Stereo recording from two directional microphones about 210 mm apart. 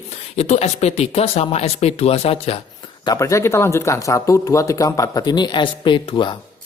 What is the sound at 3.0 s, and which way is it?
Speech, 15° left (ahead or behind).